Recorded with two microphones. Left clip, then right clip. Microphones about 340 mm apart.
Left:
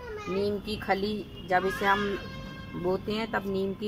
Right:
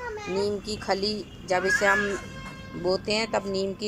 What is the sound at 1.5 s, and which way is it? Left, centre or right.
Speech, centre.